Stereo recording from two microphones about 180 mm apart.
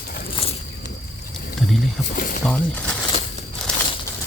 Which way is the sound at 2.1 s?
50° left (ahead or behind).